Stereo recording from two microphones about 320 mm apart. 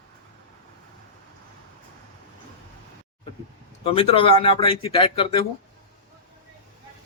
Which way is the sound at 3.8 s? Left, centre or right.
Centre.